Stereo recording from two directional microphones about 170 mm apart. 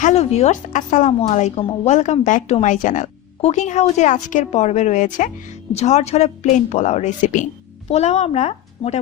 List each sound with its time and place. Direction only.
0.0 s speech: 40° left (ahead or behind)